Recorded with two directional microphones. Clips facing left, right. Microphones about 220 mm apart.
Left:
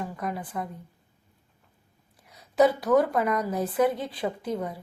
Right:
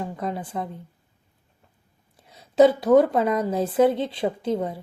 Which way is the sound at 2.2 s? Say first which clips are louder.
Right 5 dB; 25° right (ahead or behind).